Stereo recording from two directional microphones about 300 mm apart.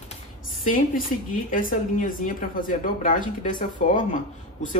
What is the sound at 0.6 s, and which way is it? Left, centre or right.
A woman's voice, left.